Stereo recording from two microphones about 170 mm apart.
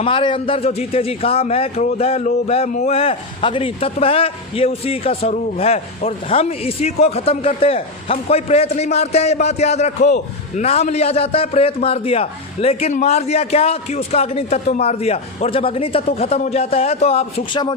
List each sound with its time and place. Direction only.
0.0 s a man's voice: 30° left (ahead or behind)